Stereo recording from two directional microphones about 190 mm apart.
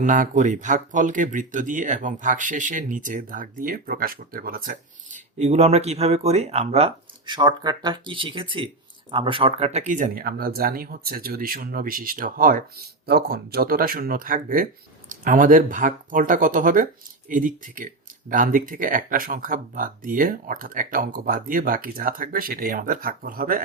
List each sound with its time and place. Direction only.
0.0 s speech: 40° right (ahead or behind)